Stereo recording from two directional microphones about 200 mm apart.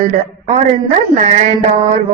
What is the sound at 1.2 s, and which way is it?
Mantra, 35° right (ahead or behind).